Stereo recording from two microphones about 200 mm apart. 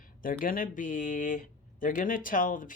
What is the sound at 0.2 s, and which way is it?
Speech, 45° left (ahead or behind).